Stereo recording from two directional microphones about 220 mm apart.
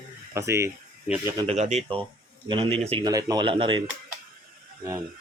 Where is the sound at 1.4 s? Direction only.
30° right (ahead or behind).